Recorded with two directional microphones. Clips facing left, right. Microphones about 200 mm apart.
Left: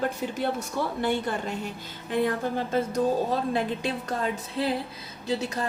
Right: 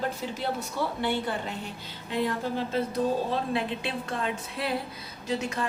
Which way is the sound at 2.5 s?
50° left (ahead or behind).